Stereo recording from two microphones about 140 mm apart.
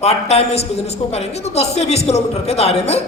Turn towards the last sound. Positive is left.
turn(degrees=50)  # may be behind; listen again after turning